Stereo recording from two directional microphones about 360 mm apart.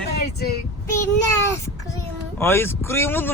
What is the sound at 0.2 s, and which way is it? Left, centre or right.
Vehicle, left.